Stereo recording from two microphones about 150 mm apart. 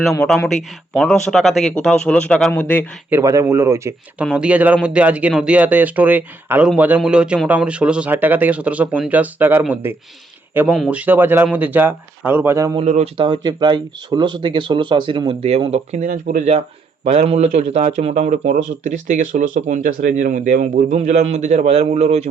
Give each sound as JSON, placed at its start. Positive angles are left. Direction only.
{"t": 0.4, "sound": "speech", "side_deg": 0}
{"t": 3.1, "sound": "speech", "side_deg": -20}
{"t": 4.2, "sound": "speech", "side_deg": -5}
{"t": 12.8, "sound": "speech", "side_deg": -50}
{"t": 13.1, "sound": "speech", "side_deg": -35}
{"t": 16.5, "sound": "speech", "side_deg": -45}